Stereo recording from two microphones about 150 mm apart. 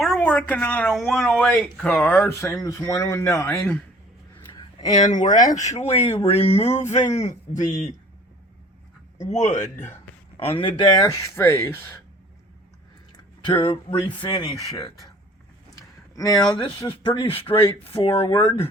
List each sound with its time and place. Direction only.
0.0 s speech: 5° left (ahead or behind)
2.4 s speech: 20° left (ahead or behind)
5.1 s speech: 55° left (ahead or behind)
9.2 s speech: 50° left (ahead or behind)
10.3 s speech: 35° left (ahead or behind)
10.9 s speech: 25° left (ahead or behind)
13.4 s speech: 35° left (ahead or behind)
15.7 s speech: 25° left (ahead or behind)
18.3 s speech: 30° left (ahead or behind)